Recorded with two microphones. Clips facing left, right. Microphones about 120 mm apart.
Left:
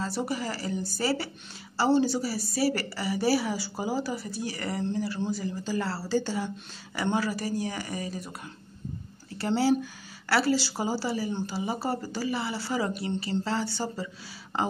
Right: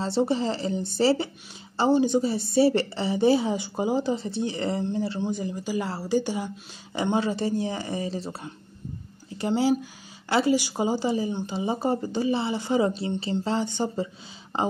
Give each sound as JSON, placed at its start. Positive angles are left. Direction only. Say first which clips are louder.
{"t": 0.0, "sound": "a woman's voice", "louder": "right 7 dB", "side_deg": -25}
{"t": 9.4, "sound": "a woman's voice", "louder": "right 1 dB", "side_deg": -15}